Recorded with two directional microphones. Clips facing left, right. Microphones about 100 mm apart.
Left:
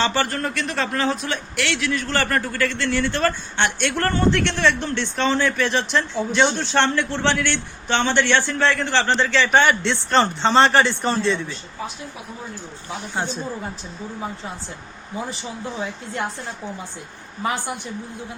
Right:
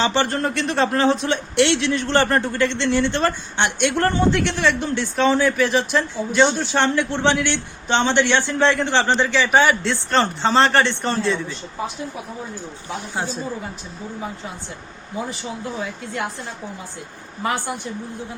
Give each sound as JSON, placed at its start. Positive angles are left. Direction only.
{"t": 0.0, "sound": "speech", "side_deg": -20}
{"t": 13.1, "sound": "speech", "side_deg": -5}